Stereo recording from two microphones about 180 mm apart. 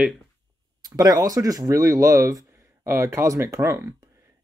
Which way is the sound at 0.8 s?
20° right (ahead or behind).